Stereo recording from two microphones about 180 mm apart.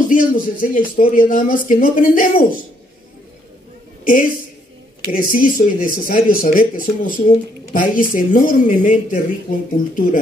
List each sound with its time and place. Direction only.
0.1 s speech: 50° left (ahead or behind)
4.0 s a woman's voice: 50° left (ahead or behind)